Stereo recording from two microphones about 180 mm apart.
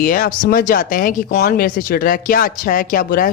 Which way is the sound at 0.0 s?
50° left (ahead or behind).